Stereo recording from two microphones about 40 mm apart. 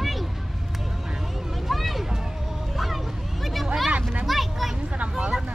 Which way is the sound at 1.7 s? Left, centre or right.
Centre.